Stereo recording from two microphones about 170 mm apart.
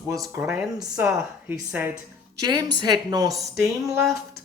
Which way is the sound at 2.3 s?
25° right (ahead or behind).